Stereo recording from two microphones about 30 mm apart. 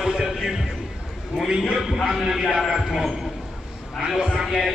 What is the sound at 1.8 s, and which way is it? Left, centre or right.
A man's voice, centre.